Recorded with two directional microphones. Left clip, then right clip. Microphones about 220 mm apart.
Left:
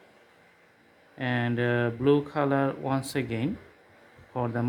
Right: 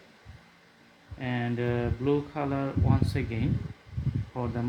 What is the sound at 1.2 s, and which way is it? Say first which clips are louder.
Speech: left 4 dB; 40° left (ahead or behind).